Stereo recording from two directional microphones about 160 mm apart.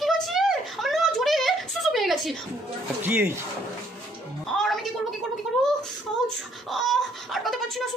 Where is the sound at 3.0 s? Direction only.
10° right (ahead or behind).